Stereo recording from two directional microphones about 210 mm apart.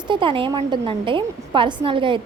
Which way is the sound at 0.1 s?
25° right (ahead or behind).